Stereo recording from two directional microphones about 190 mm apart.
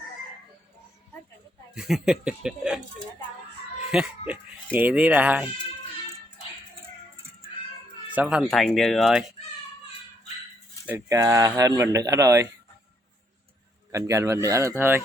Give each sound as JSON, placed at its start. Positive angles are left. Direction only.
{"t": 1.7, "sound": "speech", "side_deg": 0}
{"t": 3.9, "sound": "speech", "side_deg": -5}
{"t": 8.1, "sound": "speech", "side_deg": -5}
{"t": 10.8, "sound": "speech", "side_deg": -15}
{"t": 13.9, "sound": "speech", "side_deg": -15}